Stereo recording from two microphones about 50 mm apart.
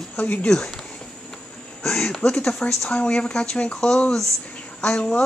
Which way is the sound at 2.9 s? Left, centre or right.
Left.